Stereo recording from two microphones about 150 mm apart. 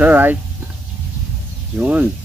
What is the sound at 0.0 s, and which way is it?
Speech, 10° right (ahead or behind).